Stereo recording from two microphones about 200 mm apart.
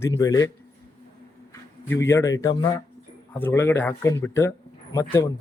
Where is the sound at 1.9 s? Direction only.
10° left (ahead or behind).